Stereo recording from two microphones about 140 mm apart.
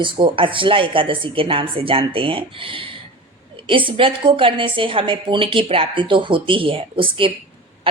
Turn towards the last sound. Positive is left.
turn(degrees=-40)  # may be behind; listen again after turning